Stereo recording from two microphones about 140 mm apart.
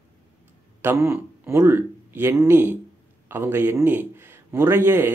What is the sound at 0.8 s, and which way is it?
Speech, 15° right (ahead or behind).